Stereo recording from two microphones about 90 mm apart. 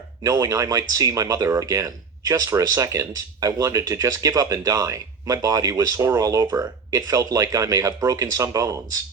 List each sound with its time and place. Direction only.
0.2 s speech: 40° right (ahead or behind)